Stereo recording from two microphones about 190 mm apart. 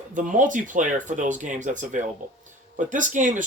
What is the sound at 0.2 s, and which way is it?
Speech, 45° right (ahead or behind).